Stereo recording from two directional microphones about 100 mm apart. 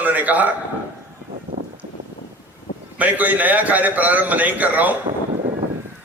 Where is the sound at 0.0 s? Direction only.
15° right (ahead or behind).